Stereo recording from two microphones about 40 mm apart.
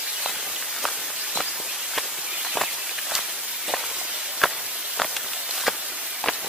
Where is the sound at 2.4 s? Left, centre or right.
Centre.